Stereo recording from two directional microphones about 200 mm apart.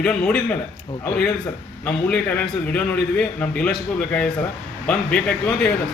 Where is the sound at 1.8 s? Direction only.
10° left (ahead or behind).